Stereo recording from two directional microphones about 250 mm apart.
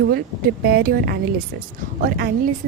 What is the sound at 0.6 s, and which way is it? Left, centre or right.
Speech, right.